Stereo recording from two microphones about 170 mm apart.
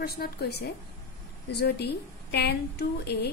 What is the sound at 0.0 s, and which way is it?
Speech, 65° left (ahead or behind).